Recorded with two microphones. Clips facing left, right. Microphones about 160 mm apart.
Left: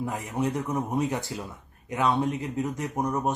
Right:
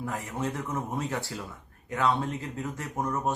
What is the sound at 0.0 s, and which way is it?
Speech, 20° left (ahead or behind).